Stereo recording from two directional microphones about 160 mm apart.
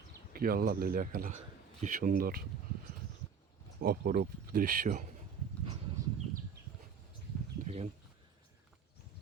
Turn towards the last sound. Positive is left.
turn(degrees=-45)  # may be behind; listen again after turning